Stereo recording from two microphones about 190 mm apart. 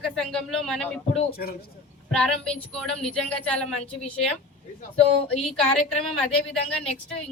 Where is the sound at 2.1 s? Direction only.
5° left (ahead or behind).